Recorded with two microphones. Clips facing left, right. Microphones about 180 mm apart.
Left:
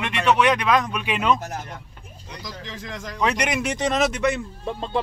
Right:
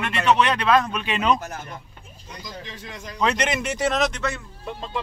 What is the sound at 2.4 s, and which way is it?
Speech, 90° left.